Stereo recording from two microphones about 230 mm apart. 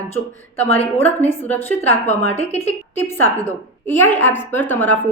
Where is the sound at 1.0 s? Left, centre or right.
Centre.